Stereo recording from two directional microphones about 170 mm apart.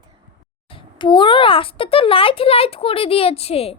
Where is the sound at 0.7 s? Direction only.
30° left (ahead or behind).